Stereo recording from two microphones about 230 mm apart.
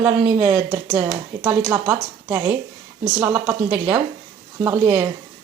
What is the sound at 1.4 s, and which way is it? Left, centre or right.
A woman's voice, centre.